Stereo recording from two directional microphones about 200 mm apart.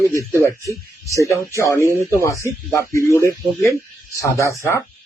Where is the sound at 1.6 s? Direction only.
15° left (ahead or behind).